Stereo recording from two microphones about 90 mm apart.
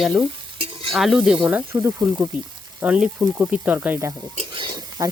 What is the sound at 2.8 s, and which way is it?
Speech, 15° right (ahead or behind).